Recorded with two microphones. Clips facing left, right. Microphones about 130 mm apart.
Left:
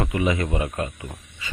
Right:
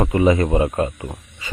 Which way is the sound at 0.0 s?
40° right (ahead or behind).